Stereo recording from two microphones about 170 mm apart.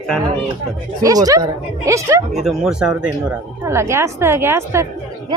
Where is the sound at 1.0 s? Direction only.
20° right (ahead or behind).